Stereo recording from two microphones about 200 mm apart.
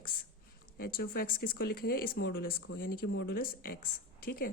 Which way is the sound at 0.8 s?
45° left (ahead or behind).